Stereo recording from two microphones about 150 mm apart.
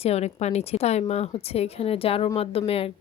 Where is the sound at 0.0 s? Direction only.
45° left (ahead or behind).